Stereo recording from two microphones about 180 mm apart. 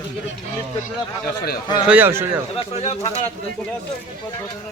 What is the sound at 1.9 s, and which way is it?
Speech, 10° right (ahead or behind).